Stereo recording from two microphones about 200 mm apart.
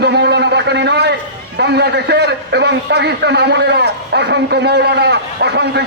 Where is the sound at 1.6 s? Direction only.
55° right (ahead or behind).